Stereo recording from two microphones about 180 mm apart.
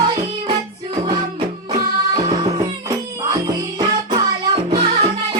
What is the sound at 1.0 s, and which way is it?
Music, 30° right (ahead or behind).